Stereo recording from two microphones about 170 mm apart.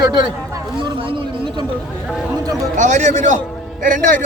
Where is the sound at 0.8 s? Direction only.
30° right (ahead or behind).